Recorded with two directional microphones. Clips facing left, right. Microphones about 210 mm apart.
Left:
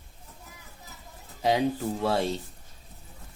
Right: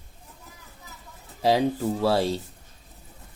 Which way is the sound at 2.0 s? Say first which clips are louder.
Right 4 dB; 35° right (ahead or behind).